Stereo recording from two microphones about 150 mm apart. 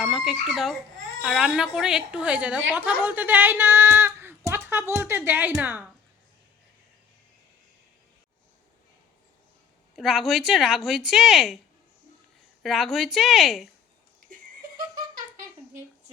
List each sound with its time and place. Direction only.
0.0 s a woman's voice: centre (ahead or behind)
9.9 s a woman's voice: centre (ahead or behind)
12.6 s a woman's voice: centre (ahead or behind)
14.8 s giggle: 70° right (ahead or behind)